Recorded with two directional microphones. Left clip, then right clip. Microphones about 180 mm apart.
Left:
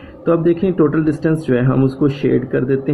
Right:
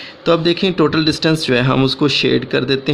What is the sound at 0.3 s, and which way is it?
Speech, 35° right (ahead or behind).